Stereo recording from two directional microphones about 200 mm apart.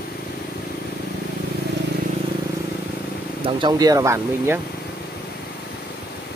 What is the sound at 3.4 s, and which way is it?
Speech, 20° right (ahead or behind).